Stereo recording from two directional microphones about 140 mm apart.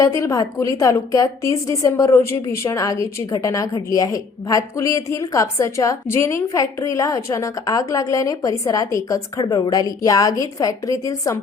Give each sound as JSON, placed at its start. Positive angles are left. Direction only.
{"t": 0.0, "sound": "a woman's voice", "side_deg": 20}